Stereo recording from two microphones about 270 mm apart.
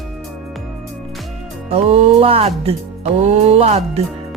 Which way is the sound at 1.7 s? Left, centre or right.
Right.